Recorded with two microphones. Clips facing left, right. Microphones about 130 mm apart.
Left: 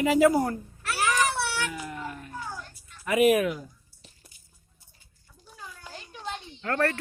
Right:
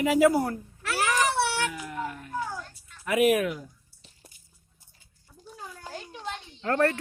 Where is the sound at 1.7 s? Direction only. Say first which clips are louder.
Right 2 dB; centre (ahead or behind).